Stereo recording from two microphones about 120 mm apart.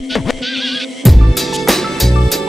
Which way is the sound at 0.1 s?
Centre (ahead or behind).